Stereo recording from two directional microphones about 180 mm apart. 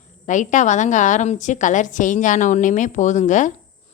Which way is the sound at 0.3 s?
45° left (ahead or behind).